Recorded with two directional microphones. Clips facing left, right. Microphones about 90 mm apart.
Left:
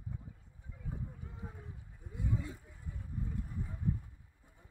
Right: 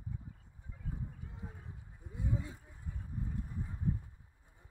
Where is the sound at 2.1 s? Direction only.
30° right (ahead or behind).